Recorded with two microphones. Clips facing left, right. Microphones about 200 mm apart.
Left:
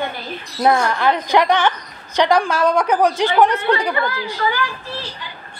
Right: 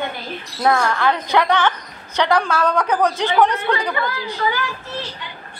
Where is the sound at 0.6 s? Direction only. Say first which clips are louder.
Left 1 dB; 15° left (ahead or behind).